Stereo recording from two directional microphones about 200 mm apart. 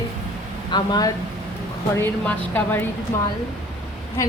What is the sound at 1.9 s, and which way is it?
Speech, 10° left (ahead or behind).